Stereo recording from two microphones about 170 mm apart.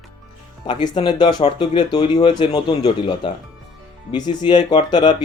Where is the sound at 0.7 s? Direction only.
25° left (ahead or behind).